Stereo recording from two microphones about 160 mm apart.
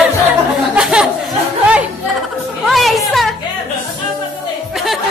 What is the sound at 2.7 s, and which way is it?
Music, centre (ahead or behind).